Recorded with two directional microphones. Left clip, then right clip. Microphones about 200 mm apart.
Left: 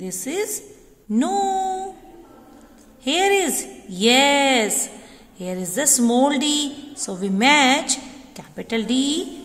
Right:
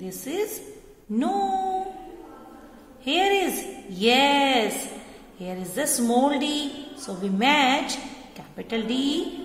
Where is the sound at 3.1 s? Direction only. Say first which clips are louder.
Left 3 dB; 35° left (ahead or behind).